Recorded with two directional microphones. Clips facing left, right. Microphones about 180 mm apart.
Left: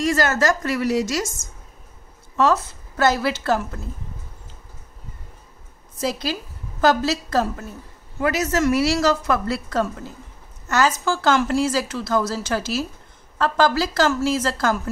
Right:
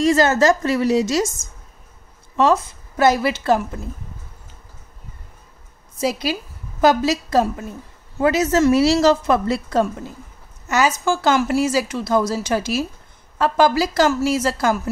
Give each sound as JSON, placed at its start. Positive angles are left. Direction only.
{"t": 0.0, "sound": "a woman's voice", "side_deg": -25}
{"t": 2.3, "sound": "a woman's voice", "side_deg": -15}
{"t": 5.9, "sound": "a woman's voice", "side_deg": -10}
{"t": 8.2, "sound": "a woman's voice", "side_deg": -25}